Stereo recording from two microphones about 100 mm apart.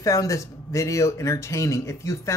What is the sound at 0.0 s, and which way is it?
Speech, 35° left (ahead or behind).